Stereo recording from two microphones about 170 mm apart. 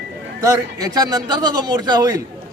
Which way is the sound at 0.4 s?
20° right (ahead or behind).